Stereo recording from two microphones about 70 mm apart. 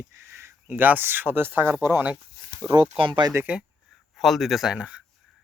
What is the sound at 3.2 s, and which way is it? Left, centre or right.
Speech, right.